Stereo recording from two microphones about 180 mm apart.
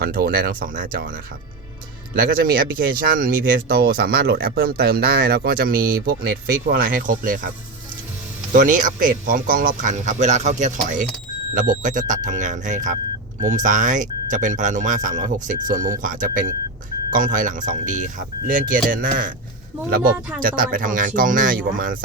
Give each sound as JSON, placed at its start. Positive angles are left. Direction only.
{"t": 0.0, "sound": "speech", "side_deg": -60}
{"t": 2.1, "sound": "speech", "side_deg": -55}
{"t": 8.5, "sound": "speech", "side_deg": -45}
{"t": 20.4, "sound": "speech", "side_deg": -50}